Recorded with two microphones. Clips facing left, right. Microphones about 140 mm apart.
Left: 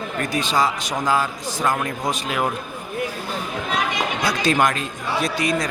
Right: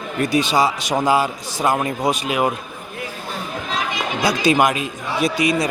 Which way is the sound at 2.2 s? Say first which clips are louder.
Right 4 dB; 5° right (ahead or behind).